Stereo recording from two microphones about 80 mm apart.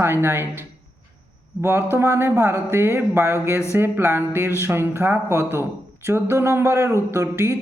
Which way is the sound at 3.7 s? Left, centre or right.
Right.